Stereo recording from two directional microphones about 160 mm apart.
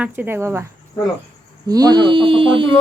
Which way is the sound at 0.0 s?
10° right (ahead or behind).